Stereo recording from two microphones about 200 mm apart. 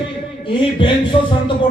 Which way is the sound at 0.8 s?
25° left (ahead or behind).